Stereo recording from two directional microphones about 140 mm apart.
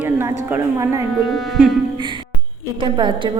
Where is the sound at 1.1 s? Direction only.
Centre (ahead or behind).